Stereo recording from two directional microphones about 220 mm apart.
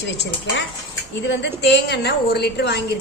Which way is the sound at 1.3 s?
50° left (ahead or behind).